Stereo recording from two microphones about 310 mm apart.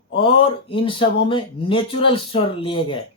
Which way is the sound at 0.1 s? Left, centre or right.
Centre.